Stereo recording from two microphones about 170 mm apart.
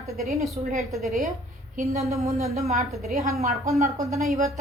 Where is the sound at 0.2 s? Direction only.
Centre (ahead or behind).